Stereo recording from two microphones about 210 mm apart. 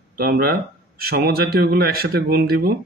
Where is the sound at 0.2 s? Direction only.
45° right (ahead or behind).